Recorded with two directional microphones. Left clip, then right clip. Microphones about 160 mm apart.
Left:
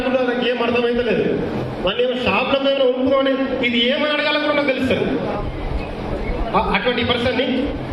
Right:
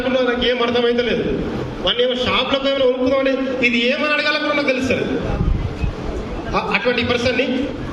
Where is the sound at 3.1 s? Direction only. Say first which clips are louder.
Even; 30° right (ahead or behind).